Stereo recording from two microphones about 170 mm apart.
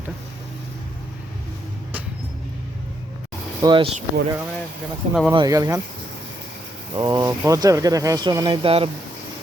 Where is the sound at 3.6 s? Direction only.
30° right (ahead or behind).